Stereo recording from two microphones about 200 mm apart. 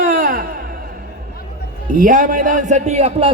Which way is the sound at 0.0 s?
45° right (ahead or behind).